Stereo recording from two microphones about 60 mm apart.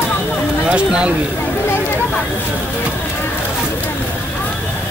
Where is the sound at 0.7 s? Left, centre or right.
Centre.